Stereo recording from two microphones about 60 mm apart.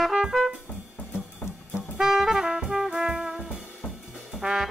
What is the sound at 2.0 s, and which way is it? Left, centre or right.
Music, centre.